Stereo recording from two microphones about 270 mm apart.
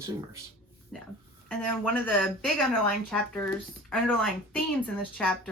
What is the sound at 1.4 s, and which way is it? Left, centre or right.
Speech, centre.